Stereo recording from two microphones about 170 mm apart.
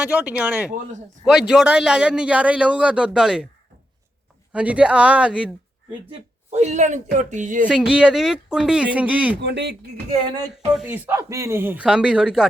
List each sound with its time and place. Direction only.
0.0 s a man's voice: 10° right (ahead or behind)
4.5 s speech: 5° right (ahead or behind)
6.5 s speech: 40° right (ahead or behind)
7.7 s a man's voice: 5° right (ahead or behind)
9.4 s speech: 80° right
10.8 s speech: 10° right (ahead or behind)